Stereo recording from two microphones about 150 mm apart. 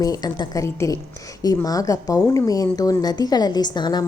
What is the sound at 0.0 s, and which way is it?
A woman's voice, 25° left (ahead or behind).